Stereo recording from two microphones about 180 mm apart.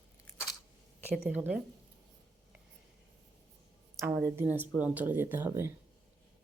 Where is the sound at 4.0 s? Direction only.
10° right (ahead or behind).